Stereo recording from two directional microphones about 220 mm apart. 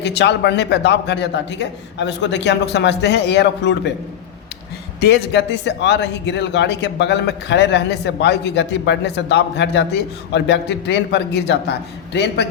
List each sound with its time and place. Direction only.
0.0 s a man's voice: 50° left (ahead or behind)
4.9 s a man's voice: 50° left (ahead or behind)